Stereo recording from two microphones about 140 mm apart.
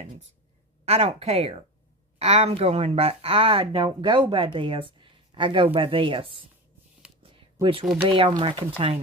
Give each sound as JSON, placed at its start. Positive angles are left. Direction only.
{"t": 0.8, "sound": "a woman's voice", "side_deg": -45}
{"t": 8.0, "sound": "speech", "side_deg": -35}